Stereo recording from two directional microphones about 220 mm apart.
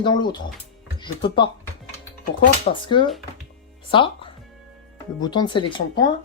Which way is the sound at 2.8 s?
20° left (ahead or behind).